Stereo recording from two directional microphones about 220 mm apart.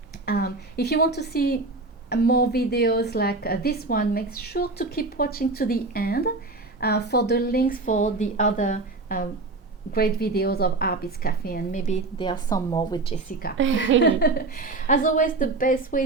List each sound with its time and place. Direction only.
0.3 s a woman's voice: 45° left (ahead or behind)
12.2 s speech: 20° left (ahead or behind)
13.6 s a woman's voice: 60° right (ahead or behind)
14.0 s speech: 45° left (ahead or behind)